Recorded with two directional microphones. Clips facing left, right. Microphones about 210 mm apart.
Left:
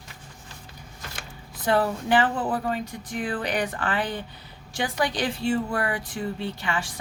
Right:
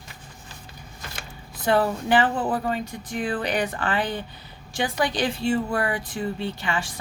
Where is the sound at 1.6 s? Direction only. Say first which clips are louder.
Right 2 dB; 25° right (ahead or behind).